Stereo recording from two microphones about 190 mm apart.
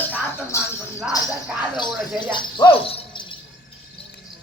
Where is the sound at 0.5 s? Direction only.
15° left (ahead or behind).